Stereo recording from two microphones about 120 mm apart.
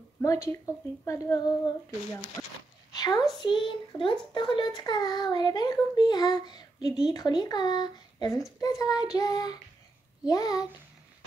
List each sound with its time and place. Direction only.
0.2 s child singing: 25° left (ahead or behind)
2.4 s dog: 25° left (ahead or behind)
2.9 s a sound: 35° left (ahead or behind)
3.3 s speech: 45° left (ahead or behind)